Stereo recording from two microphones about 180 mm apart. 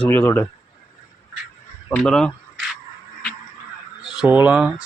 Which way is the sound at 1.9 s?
5° left (ahead or behind).